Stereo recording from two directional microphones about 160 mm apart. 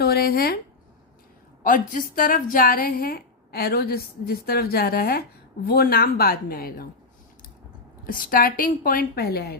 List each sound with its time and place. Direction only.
0.0 s speech: 75° left (ahead or behind)
1.6 s a woman's voice: 60° left (ahead or behind)
8.0 s a woman's voice: 60° left (ahead or behind)